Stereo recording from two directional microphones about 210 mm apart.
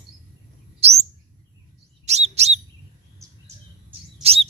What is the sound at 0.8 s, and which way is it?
Bird, 30° right (ahead or behind).